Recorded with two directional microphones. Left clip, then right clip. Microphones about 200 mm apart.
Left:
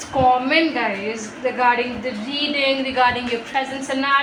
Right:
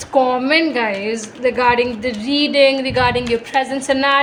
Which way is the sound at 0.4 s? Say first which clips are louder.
Right 3 dB; 50° right (ahead or behind).